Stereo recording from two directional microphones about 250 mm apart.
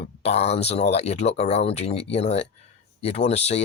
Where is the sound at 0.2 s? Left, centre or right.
Left.